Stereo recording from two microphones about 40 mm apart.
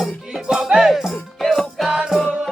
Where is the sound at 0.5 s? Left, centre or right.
Centre.